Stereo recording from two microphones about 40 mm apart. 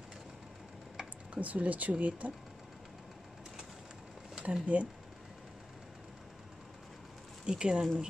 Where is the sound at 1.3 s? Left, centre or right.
Right.